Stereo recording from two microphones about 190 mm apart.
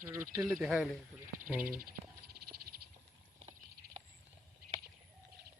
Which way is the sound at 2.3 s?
55° right (ahead or behind).